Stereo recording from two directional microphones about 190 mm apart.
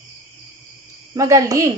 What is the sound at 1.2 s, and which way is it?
Speech, 15° right (ahead or behind).